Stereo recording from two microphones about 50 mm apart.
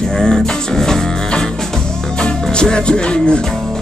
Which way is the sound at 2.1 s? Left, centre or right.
Centre.